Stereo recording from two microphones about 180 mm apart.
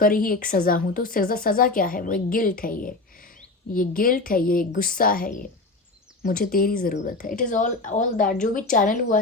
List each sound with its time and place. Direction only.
0.0 s speech: 50° left (ahead or behind)